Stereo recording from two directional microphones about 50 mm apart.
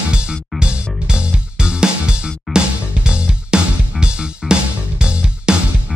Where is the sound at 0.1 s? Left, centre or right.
Centre.